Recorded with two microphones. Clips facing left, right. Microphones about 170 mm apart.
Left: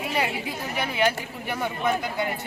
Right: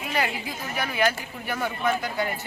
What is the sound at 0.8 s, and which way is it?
Speech, 20° left (ahead or behind).